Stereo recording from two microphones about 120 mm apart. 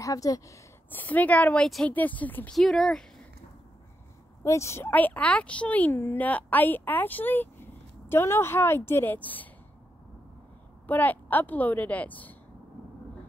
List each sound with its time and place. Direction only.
0.0 s speech: 30° left (ahead or behind)
0.8 s speech: 15° left (ahead or behind)
2.5 s speech: centre (ahead or behind)
4.4 s speech: 25° left (ahead or behind)
10.9 s speech: 15° left (ahead or behind)